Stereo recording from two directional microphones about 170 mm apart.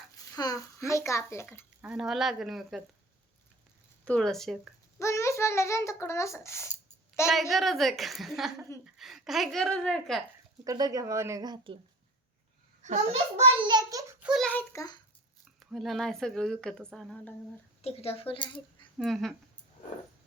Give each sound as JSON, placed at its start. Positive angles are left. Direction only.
{"t": 0.3, "sound": "a child's voice", "side_deg": 20}
{"t": 1.8, "sound": "speech", "side_deg": -5}
{"t": 4.0, "sound": "speech", "side_deg": 5}
{"t": 4.9, "sound": "a child's voice", "side_deg": 15}
{"t": 7.3, "sound": "speech", "side_deg": 0}
{"t": 10.6, "sound": "speech", "side_deg": -20}
{"t": 12.8, "sound": "a child's voice", "side_deg": -40}
{"t": 13.7, "sound": "a sound", "side_deg": -20}
{"t": 14.2, "sound": "a sound", "side_deg": 0}
{"t": 14.5, "sound": "a child's voice", "side_deg": 15}
{"t": 15.7, "sound": "speech", "side_deg": 0}
{"t": 17.8, "sound": "speech", "side_deg": 35}
{"t": 18.9, "sound": "speech", "side_deg": 0}